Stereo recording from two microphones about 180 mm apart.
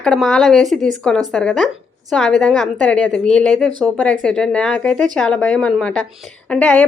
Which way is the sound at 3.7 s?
25° right (ahead or behind).